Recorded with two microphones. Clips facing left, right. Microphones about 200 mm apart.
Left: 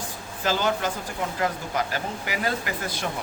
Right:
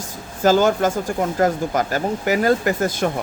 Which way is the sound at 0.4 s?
45° right (ahead or behind).